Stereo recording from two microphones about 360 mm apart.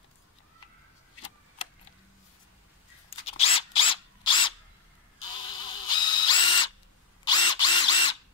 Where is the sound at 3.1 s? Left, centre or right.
Centre.